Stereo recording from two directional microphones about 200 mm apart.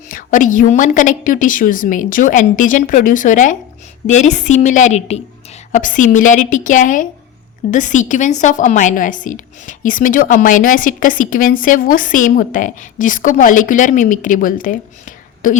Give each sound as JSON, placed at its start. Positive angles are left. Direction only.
{"t": 0.1, "sound": "a woman's voice", "side_deg": 40}